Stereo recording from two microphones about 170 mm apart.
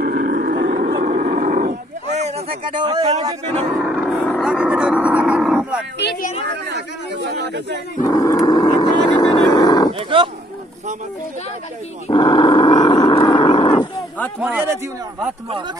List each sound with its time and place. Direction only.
0.0 s wild animals: 55° right (ahead or behind)
1.0 s a sound: 55° right (ahead or behind)
2.7 s speech: 25° right (ahead or behind)
3.8 s vehicle: 5° right (ahead or behind)
4.3 s roaring cats: centre (ahead or behind)
6.4 s speech: 85° right
8.1 s vehicle: 20° left (ahead or behind)
9.9 s speech: 30° right (ahead or behind)
12.1 s roaring cats: 30° left (ahead or behind)
14.4 s speech: 10° right (ahead or behind)